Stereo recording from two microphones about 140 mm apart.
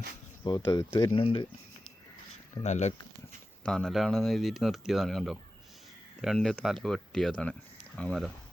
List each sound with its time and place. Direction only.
0.4 s speech: 30° left (ahead or behind)
1.1 s speech: 40° left (ahead or behind)
2.6 s speech: 55° left (ahead or behind)
3.6 s speech: 5° left (ahead or behind)